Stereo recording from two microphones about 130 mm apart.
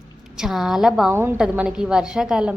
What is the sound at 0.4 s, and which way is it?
Speech, 5° right (ahead or behind).